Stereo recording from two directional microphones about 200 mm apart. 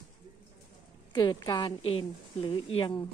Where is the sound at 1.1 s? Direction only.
20° left (ahead or behind).